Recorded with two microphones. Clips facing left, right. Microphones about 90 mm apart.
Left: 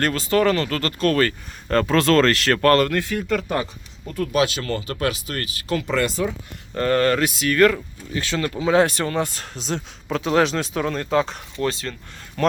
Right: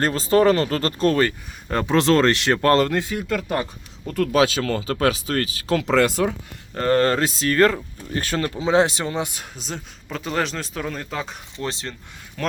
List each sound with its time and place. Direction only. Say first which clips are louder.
0.0 s speech: right 2 dB; 30° right (ahead or behind)
4.1 s speech: right 2 dB; 85° right
6.7 s speech: even; 30° right (ahead or behind)
8.1 s speech: right 1 dB; 45° right (ahead or behind)
8.4 s speech: left 1 dB; 25° right (ahead or behind)
9.6 s speech: left 7 dB; centre (ahead or behind)
11.5 s speech: left 5 dB; 25° right (ahead or behind)
12.4 s speech: left 6 dB; centre (ahead or behind)